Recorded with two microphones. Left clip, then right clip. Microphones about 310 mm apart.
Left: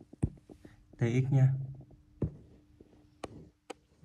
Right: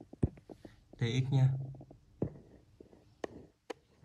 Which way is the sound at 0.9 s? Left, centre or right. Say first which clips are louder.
Left 4 dB; centre.